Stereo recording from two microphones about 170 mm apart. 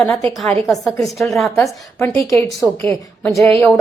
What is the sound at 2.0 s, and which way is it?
A woman's voice, 15° left (ahead or behind).